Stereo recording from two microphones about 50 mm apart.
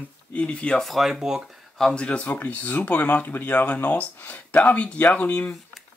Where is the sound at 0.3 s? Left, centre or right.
Left.